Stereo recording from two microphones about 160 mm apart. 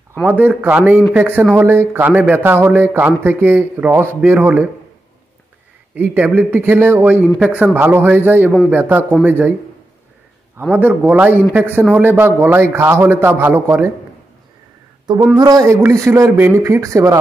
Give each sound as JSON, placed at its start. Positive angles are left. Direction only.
{"t": 0.2, "sound": "speech", "side_deg": -10}
{"t": 5.9, "sound": "speech", "side_deg": -10}
{"t": 10.5, "sound": "speech", "side_deg": -10}
{"t": 15.3, "sound": "speech", "side_deg": -25}